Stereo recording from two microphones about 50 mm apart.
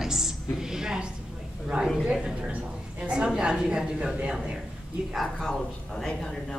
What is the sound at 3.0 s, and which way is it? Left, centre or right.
A woman's voice, centre.